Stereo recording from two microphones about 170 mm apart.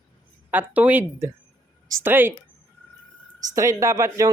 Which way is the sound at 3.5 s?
20° right (ahead or behind).